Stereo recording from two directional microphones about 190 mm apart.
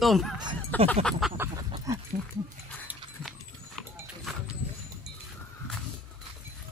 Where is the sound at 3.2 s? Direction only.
Centre (ahead or behind).